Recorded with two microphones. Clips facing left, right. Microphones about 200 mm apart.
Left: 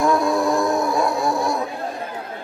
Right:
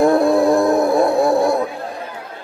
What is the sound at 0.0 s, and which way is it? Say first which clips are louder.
Music: right 6 dB; 55° right (ahead or behind).